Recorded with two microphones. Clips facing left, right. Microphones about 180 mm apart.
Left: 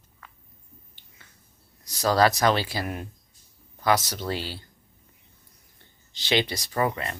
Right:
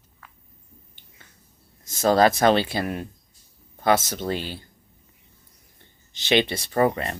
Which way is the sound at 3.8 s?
25° right (ahead or behind).